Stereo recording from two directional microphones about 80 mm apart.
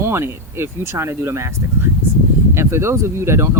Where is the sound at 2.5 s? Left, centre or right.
Right.